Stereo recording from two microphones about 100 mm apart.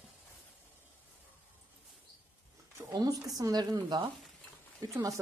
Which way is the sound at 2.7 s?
40° right (ahead or behind).